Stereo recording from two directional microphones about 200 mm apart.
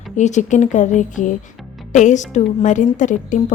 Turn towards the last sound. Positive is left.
turn(degrees=40)  # may be behind; listen again after turning